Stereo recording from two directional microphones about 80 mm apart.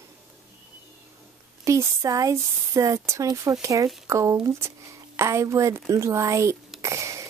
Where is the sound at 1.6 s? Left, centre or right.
Right.